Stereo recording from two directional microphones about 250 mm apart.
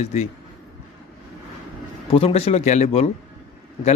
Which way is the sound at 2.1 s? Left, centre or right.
Left.